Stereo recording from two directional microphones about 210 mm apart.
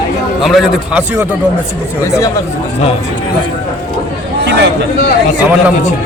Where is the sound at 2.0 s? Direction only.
15° left (ahead or behind).